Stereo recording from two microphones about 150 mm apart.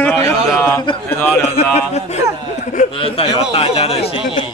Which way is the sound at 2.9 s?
35° left (ahead or behind).